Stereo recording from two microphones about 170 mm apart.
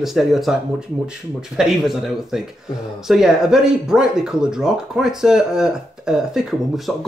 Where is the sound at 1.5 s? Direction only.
Centre (ahead or behind).